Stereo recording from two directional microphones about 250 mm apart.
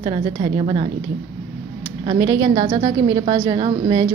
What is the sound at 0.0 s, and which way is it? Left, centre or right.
Speech, right.